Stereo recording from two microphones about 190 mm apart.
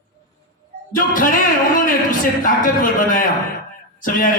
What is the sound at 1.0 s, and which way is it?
Music, 45° left (ahead or behind).